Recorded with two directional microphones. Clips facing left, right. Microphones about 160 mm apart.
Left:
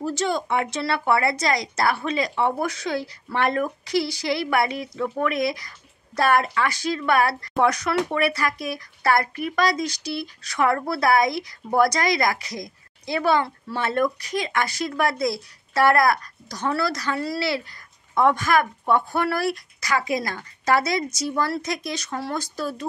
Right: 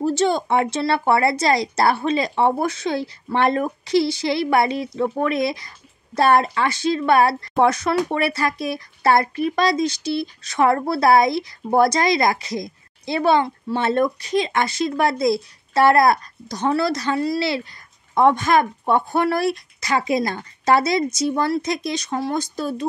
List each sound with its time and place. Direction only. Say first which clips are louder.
0.0 s speech: right 5 dB; 25° right (ahead or behind)